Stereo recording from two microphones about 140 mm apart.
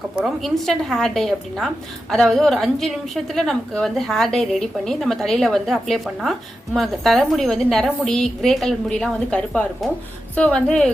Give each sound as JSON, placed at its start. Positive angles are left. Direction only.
{"t": 0.4, "sound": "a woman's voice", "side_deg": 0}